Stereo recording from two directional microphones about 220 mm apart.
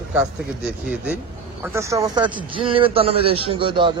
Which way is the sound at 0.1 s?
5° right (ahead or behind).